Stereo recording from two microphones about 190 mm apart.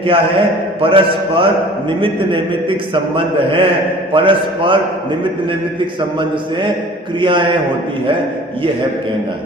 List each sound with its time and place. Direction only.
0.0 s a man's voice: 30° right (ahead or behind)
7.2 s a man's voice: 25° right (ahead or behind)